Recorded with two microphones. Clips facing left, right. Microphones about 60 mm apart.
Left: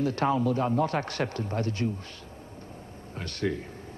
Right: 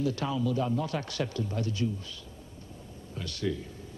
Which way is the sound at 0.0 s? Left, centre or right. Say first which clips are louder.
Left 4 dB; left.